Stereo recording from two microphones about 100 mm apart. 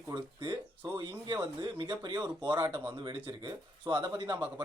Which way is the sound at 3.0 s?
50° right (ahead or behind).